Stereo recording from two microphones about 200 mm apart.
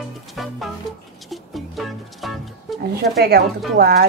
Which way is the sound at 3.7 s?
50° right (ahead or behind).